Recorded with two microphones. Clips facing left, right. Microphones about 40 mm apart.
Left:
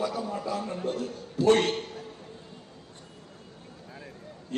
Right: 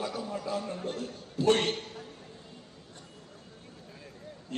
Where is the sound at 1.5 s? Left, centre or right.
Left.